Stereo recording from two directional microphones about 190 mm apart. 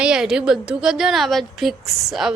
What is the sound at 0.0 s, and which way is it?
A woman's voice, 5° right (ahead or behind).